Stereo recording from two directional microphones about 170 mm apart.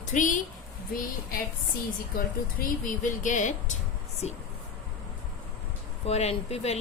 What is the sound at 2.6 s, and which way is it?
Speech, 50° left (ahead or behind).